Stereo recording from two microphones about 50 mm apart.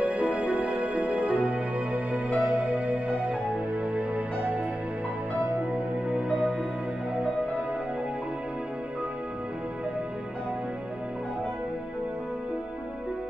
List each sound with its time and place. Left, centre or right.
0.0 s music: right
5.6 s music: right